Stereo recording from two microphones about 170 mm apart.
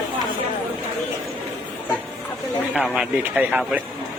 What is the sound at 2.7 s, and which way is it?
A man's voice, 5° right (ahead or behind).